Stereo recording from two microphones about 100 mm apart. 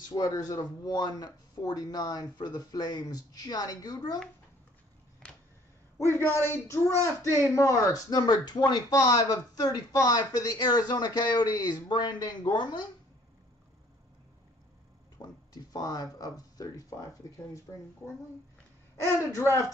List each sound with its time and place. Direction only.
0.1 s speech: 40° left (ahead or behind)
5.9 s a man's voice: 25° left (ahead or behind); by 12.8 s 50° left (ahead or behind)
15.2 s a sound: 45° left (ahead or behind)
15.5 s speech: 40° left (ahead or behind)